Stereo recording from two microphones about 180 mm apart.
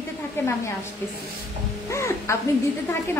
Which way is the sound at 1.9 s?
15° left (ahead or behind).